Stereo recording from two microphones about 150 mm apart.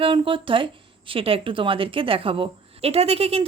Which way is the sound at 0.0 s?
35° right (ahead or behind).